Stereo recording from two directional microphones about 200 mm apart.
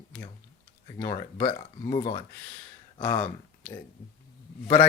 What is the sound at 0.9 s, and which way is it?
Speech, 20° left (ahead or behind).